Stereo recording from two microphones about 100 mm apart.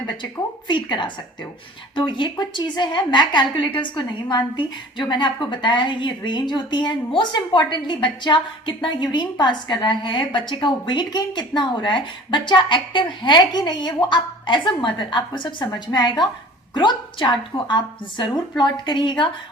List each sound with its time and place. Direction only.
0.7 s a woman's voice: 50° left (ahead or behind)